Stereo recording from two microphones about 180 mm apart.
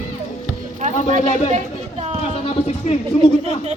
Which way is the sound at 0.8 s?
45° right (ahead or behind).